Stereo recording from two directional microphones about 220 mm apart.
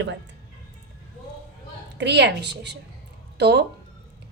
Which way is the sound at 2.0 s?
50° right (ahead or behind).